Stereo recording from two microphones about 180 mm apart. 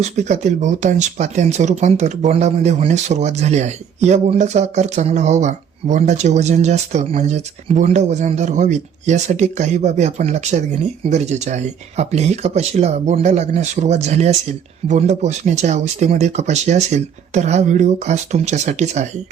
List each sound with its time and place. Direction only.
0.0 s speech: 40° right (ahead or behind)